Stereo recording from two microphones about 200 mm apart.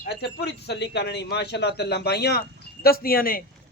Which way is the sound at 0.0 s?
55° left (ahead or behind).